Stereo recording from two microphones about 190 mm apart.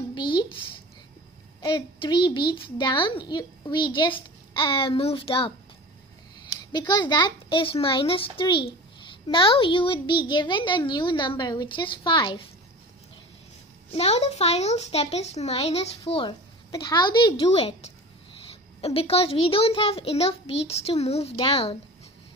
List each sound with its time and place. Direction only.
0.1 s a sound: 25° left (ahead or behind)
1.6 s a child's voice: 25° left (ahead or behind)
6.6 s a child's voice: 25° left (ahead or behind)
13.9 s speech: 35° left (ahead or behind)